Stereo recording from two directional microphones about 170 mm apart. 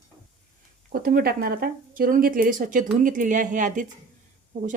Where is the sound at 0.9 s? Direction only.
60° right (ahead or behind).